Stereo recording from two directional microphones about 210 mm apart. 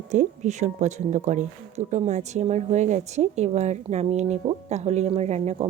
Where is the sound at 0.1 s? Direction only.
35° right (ahead or behind).